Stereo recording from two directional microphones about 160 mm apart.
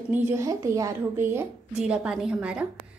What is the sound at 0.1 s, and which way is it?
A woman's voice, 15° right (ahead or behind).